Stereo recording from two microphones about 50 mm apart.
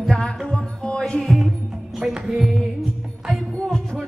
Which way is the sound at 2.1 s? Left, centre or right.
Centre.